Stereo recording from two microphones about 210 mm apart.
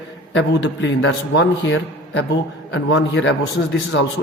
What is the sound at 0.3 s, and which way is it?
A man's voice, 60° left (ahead or behind).